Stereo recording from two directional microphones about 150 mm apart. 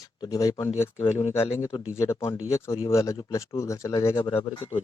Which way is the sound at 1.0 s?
45° left (ahead or behind).